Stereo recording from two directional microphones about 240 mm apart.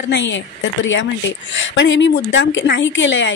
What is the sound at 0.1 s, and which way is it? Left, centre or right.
Speech, left.